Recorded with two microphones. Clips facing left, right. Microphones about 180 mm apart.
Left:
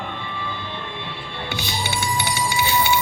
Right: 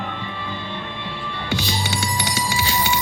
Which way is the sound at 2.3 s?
40° right (ahead or behind).